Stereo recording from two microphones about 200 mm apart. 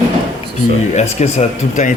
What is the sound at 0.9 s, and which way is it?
Speech, 35° left (ahead or behind).